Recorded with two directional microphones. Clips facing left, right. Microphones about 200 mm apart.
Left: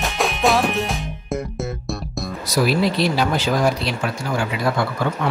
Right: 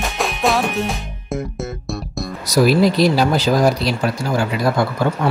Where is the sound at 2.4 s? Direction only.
40° right (ahead or behind).